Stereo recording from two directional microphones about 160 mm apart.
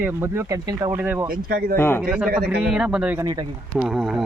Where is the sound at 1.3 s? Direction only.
65° right (ahead or behind).